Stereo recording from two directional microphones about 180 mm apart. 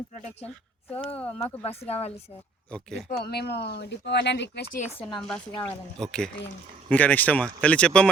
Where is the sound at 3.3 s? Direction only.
65° left (ahead or behind).